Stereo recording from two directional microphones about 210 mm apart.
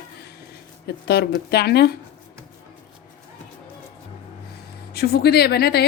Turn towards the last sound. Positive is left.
turn(degrees=50)  # may be behind; listen again after turning